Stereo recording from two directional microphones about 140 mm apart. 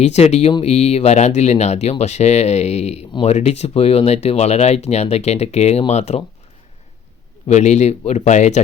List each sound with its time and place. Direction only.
0.0 s speech: 50° left (ahead or behind)
3.1 s speech: 35° left (ahead or behind)
3.3 s speech: 50° left (ahead or behind)
7.4 s speech: 55° left (ahead or behind)